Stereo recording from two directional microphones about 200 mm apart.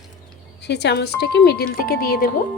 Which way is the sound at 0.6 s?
55° left (ahead or behind).